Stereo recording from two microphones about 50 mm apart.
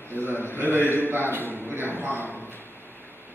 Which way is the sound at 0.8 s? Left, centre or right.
Left.